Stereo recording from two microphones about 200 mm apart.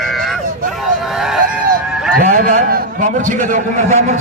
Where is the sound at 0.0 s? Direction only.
Centre (ahead or behind).